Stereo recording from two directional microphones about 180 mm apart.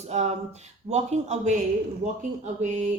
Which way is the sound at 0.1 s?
40° right (ahead or behind).